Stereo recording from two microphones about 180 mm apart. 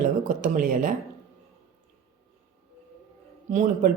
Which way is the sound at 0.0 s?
45° right (ahead or behind).